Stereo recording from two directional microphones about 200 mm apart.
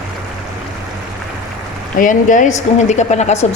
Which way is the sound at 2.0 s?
40° left (ahead or behind).